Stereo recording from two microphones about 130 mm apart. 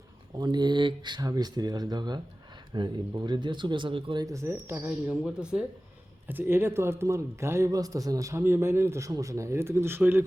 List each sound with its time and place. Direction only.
0.3 s speech: 35° right (ahead or behind)
4.9 s a man's voice: 5° right (ahead or behind)